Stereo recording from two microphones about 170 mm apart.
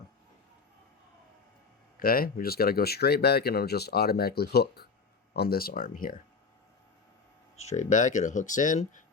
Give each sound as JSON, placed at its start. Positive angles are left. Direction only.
{"t": 2.0, "sound": "speech", "side_deg": 60}
{"t": 7.5, "sound": "speech", "side_deg": 40}